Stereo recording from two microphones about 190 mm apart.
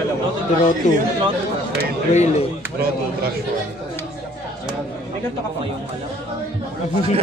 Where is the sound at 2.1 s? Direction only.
35° left (ahead or behind).